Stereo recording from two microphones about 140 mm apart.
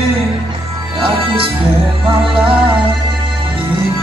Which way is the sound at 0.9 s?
40° right (ahead or behind).